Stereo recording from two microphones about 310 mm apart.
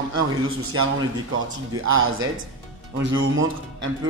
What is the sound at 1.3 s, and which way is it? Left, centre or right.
A man's voice, right.